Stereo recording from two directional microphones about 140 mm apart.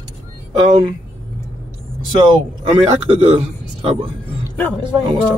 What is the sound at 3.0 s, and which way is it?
Speech, 35° right (ahead or behind).